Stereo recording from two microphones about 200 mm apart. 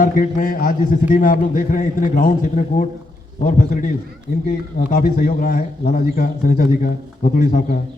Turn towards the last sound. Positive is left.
turn(degrees=45)  # may be behind; listen again after turning